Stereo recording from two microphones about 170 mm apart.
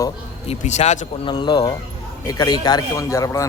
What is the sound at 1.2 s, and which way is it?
Speech, 30° left (ahead or behind).